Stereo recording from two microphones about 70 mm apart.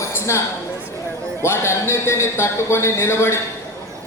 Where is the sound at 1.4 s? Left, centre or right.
Left.